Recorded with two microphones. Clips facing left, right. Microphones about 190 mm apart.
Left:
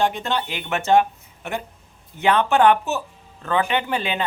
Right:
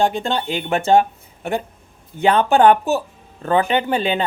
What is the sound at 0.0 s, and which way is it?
A man's voice, 30° right (ahead or behind).